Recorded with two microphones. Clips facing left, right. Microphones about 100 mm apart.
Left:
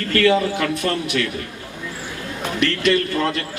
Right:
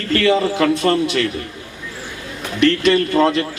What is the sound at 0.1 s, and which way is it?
Speech, 25° right (ahead or behind).